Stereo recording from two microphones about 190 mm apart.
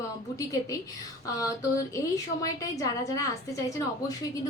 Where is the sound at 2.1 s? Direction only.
15° left (ahead or behind).